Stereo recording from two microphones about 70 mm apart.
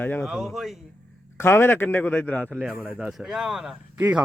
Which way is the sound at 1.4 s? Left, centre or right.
Left.